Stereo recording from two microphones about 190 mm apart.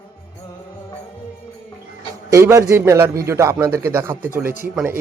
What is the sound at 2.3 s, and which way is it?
A man's voice, 15° right (ahead or behind).